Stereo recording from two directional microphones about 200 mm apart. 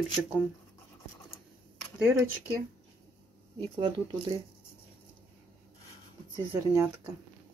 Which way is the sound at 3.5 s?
20° right (ahead or behind).